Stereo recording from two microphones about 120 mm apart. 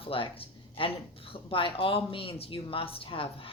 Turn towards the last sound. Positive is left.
turn(degrees=50)  # may be behind; listen again after turning